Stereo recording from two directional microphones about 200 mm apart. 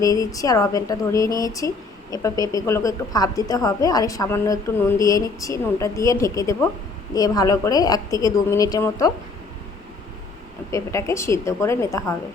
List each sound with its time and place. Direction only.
0.0 s speech: 15° left (ahead or behind)
10.7 s speech: 15° left (ahead or behind)